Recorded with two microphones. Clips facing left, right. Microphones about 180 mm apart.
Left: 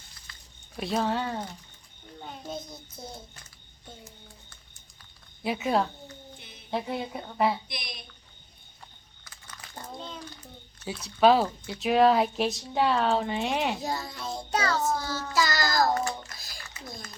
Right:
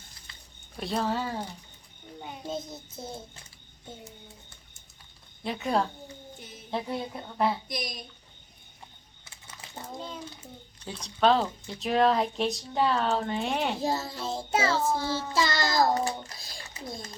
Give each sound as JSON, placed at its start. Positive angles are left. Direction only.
{"t": 0.3, "sound": "a sound", "side_deg": -25}
{"t": 0.8, "sound": "speech", "side_deg": 0}
{"t": 2.2, "sound": "a sound", "side_deg": -10}
{"t": 2.5, "sound": "child singing", "side_deg": -25}
{"t": 5.4, "sound": "speech", "side_deg": 5}
{"t": 7.7, "sound": "a woman's voice", "side_deg": -40}
{"t": 9.2, "sound": "typing", "side_deg": -25}
{"t": 10.0, "sound": "a child's voice", "side_deg": -10}
{"t": 11.0, "sound": "speech", "side_deg": 5}
{"t": 13.7, "sound": "child singing", "side_deg": -30}
{"t": 16.0, "sound": "speech", "side_deg": -30}